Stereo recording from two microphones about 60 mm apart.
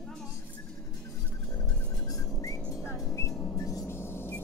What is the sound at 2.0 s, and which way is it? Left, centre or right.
Whistling, left.